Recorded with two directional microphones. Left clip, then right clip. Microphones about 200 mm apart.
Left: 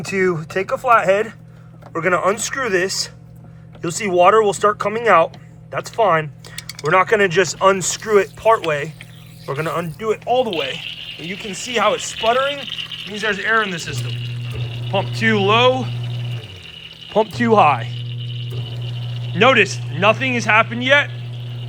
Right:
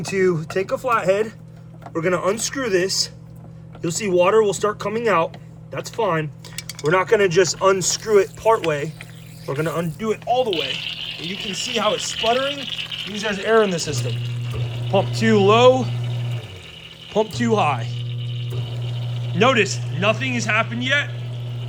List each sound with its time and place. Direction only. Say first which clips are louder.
0.0 s speech: left 1 dB; 5° right (ahead or behind)
13.2 s speech: even; 25° right (ahead or behind)
14.0 s water: even; centre (ahead or behind)
15.1 s speech: left 1 dB; 20° right (ahead or behind)
15.9 s a sound: left 1 dB; centre (ahead or behind)
17.1 s speech: left 4 dB; centre (ahead or behind)
19.3 s speech: left 4 dB; 10° right (ahead or behind)